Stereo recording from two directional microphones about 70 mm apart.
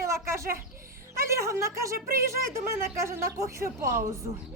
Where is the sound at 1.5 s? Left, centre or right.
Right.